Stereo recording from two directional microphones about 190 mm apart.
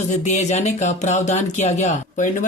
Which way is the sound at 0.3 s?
35° left (ahead or behind).